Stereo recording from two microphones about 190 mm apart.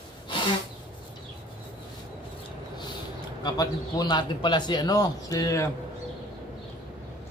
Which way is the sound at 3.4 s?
20° left (ahead or behind).